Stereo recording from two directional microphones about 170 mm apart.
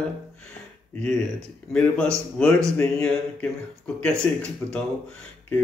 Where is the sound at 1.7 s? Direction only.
5° left (ahead or behind).